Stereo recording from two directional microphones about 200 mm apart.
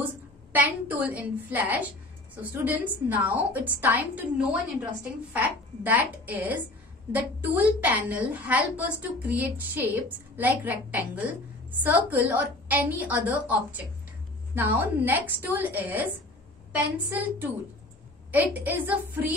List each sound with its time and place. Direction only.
0.0 s a woman's voice: 10° right (ahead or behind)
5.9 s a woman's voice: 10° right (ahead or behind)